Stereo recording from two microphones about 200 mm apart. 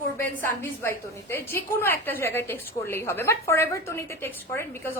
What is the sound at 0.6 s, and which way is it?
A woman's voice, 10° left (ahead or behind).